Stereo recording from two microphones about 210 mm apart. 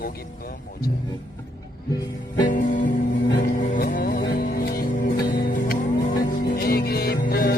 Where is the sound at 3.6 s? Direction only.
40° left (ahead or behind).